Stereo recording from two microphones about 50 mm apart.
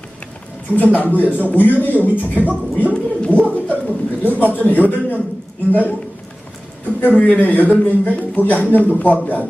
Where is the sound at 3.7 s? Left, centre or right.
Right.